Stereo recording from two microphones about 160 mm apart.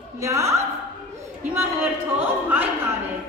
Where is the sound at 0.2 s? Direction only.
20° right (ahead or behind).